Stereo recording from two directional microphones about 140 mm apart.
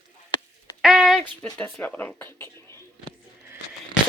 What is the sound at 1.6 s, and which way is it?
Speech, 15° left (ahead or behind).